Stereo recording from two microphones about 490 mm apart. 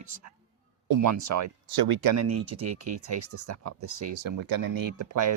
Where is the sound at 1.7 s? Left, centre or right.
Right.